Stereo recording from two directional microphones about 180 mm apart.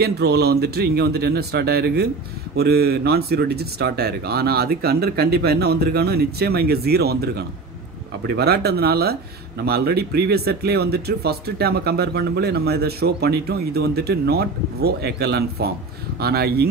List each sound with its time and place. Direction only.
0.0 s speech: 60° right (ahead or behind)